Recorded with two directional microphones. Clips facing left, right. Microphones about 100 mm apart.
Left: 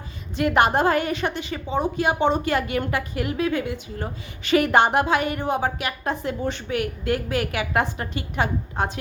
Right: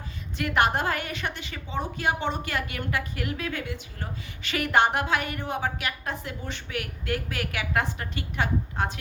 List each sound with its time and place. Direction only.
0.3 s a woman's voice: 20° left (ahead or behind)